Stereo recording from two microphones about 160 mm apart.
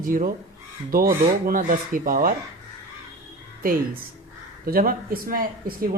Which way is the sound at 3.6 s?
60° right (ahead or behind).